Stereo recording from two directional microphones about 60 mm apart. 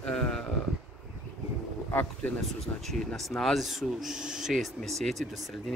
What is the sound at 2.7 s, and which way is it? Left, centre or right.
Speech, left.